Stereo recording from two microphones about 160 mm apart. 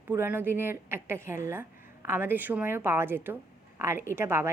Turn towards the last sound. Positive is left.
turn(degrees=-15)  # may be behind; listen again after turning